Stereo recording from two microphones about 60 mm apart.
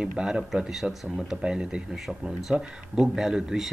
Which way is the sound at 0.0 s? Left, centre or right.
Centre.